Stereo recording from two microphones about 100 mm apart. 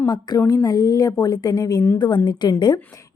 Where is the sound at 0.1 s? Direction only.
40° left (ahead or behind).